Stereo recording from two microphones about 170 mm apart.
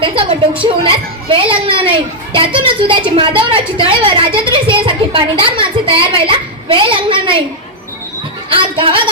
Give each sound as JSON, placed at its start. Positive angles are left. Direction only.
{"t": 0.0, "sound": "a woman's voice", "side_deg": -30}
{"t": 8.4, "sound": "a woman's voice", "side_deg": -30}